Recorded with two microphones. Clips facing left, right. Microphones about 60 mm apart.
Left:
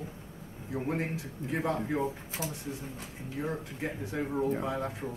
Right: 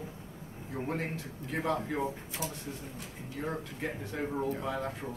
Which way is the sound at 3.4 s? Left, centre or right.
Centre.